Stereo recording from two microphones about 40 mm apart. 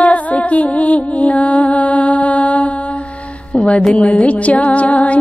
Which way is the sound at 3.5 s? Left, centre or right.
Left.